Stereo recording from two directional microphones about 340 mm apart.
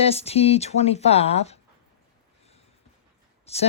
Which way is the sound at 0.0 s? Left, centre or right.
Centre.